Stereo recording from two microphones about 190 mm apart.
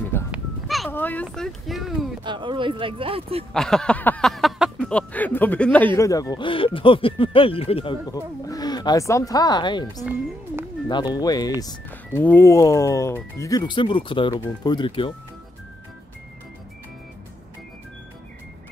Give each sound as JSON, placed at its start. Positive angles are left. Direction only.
{"t": 0.3, "sound": "a sound", "side_deg": 0}
{"t": 0.8, "sound": "speech", "side_deg": 10}
{"t": 2.2, "sound": "speech", "side_deg": -25}
{"t": 3.5, "sound": "a sound", "side_deg": 5}
{"t": 5.9, "sound": "speech", "side_deg": 15}
{"t": 11.1, "sound": "speech", "side_deg": 20}